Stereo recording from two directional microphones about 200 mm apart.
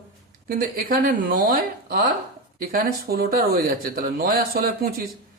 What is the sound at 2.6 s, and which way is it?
Speech, 50° right (ahead or behind).